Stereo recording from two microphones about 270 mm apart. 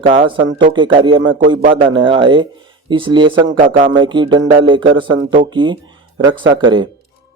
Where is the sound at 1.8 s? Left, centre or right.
Centre.